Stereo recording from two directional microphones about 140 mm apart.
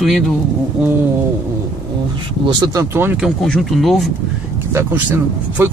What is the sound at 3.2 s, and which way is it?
Speech, centre (ahead or behind).